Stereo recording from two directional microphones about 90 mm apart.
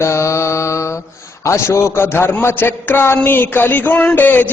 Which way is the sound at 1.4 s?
30° left (ahead or behind).